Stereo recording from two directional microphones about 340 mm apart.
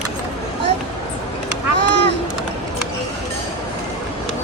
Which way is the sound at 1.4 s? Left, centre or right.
Right.